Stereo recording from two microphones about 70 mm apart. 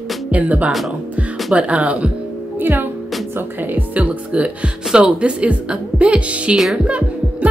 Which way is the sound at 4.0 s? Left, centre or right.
Centre.